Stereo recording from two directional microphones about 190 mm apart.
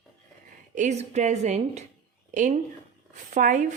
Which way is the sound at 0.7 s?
35° right (ahead or behind).